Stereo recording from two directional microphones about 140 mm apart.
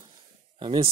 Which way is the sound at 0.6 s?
35° right (ahead or behind).